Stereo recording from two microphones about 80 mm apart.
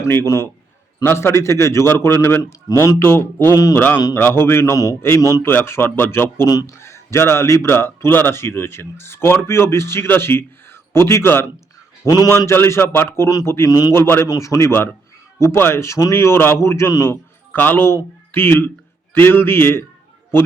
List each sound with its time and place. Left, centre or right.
1.0 s speech: left
2.4 s speech: left
2.7 s speech: left
3.0 s speech: left
12.0 s a man's voice: left
12.5 s speech: left
13.7 s a man's voice: left
13.9 s speech: left
14.3 s speech: left